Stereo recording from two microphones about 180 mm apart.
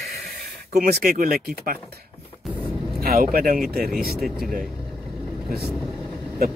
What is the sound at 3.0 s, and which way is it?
Speech, 55° right (ahead or behind).